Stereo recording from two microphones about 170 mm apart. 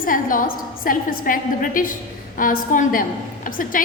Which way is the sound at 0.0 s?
55° left (ahead or behind).